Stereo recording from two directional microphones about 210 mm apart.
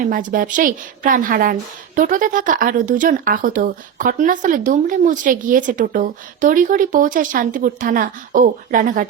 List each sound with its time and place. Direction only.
0.0 s speech: 40° right (ahead or behind)